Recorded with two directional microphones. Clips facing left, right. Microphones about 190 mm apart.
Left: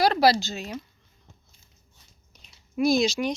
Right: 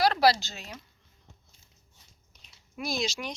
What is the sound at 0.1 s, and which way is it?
Speech, 15° left (ahead or behind).